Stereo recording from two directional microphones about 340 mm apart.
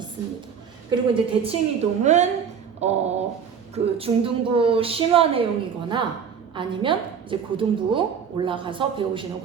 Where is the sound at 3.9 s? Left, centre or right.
Centre.